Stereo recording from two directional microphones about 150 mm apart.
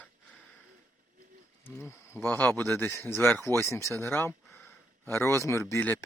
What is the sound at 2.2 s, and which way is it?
Speech, 10° left (ahead or behind).